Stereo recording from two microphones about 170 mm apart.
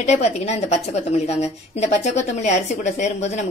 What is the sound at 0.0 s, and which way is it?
A woman's voice, 40° left (ahead or behind).